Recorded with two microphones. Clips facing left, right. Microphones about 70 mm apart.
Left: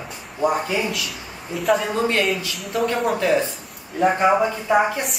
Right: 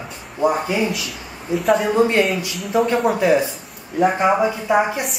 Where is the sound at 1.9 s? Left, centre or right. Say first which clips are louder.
Right 5 dB; right.